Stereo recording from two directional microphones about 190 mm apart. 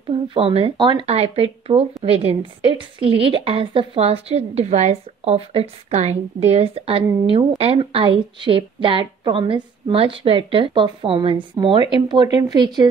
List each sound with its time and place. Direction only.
0.3 s a woman's voice: 30° right (ahead or behind)